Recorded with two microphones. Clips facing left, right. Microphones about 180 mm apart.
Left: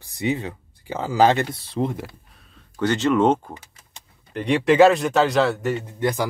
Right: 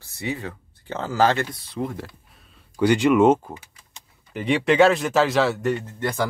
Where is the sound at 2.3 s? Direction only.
Centre (ahead or behind).